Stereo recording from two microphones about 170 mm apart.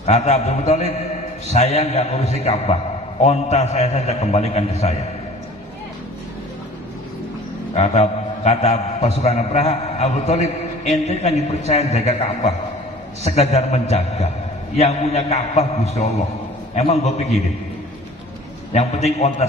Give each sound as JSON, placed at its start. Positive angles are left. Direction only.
{"t": 0.0, "sound": "a man's voice", "side_deg": 40}
{"t": 7.7, "sound": "a man's voice", "side_deg": 40}
{"t": 18.7, "sound": "a man's voice", "side_deg": 40}